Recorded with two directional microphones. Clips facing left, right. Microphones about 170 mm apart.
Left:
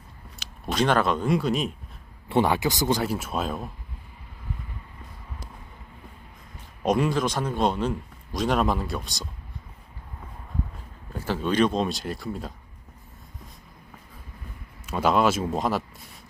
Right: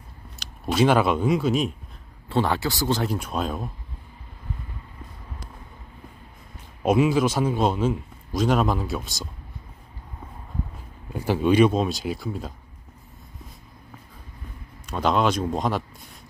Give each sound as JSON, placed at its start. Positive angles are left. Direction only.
{"t": 0.3, "sound": "speech", "side_deg": -5}
{"t": 2.3, "sound": "speech", "side_deg": 15}
{"t": 3.0, "sound": "a man's voice", "side_deg": 5}
{"t": 6.8, "sound": "a man's voice", "side_deg": -5}
{"t": 11.1, "sound": "a man's voice", "side_deg": -15}
{"t": 14.8, "sound": "a man's voice", "side_deg": 5}